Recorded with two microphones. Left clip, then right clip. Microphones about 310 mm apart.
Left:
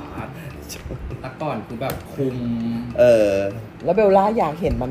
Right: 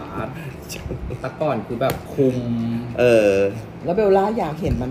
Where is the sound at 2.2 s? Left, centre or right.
Right.